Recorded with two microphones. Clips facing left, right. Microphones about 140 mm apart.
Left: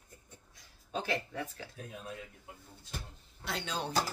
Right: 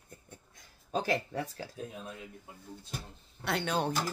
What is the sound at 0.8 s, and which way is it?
Speech, 40° right (ahead or behind).